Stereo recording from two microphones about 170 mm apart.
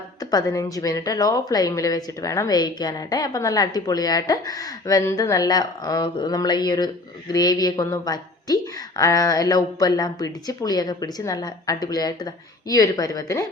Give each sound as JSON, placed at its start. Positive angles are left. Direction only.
{"t": 0.2, "sound": "a woman's voice", "side_deg": 20}